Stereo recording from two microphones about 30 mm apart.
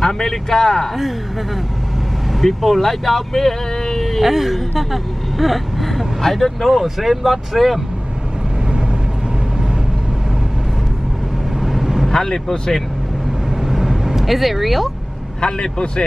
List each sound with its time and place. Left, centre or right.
0.0 s a man's voice: centre
2.4 s speech: centre
4.2 s speech: centre
11.6 s vehicle: centre
12.1 s speech: centre
13.6 s vehicle: centre
15.4 s a man's voice: left